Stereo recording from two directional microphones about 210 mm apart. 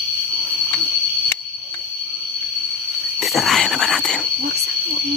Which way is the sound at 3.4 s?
Centre (ahead or behind).